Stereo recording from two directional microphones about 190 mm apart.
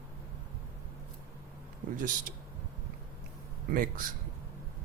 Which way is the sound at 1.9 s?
45° right (ahead or behind).